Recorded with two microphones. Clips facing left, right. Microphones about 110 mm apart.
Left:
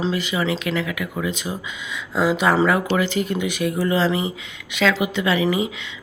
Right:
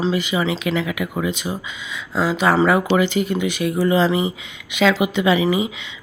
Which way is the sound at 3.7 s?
10° right (ahead or behind).